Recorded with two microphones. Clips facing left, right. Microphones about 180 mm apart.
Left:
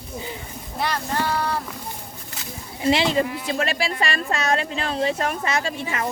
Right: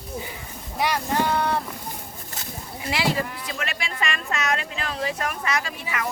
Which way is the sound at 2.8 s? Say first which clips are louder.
Left 6 dB; 25° left (ahead or behind).